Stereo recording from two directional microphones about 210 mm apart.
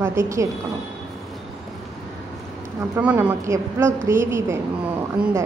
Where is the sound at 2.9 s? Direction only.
5° right (ahead or behind).